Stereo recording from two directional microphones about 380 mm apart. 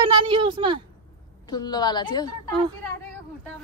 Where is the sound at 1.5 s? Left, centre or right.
Centre.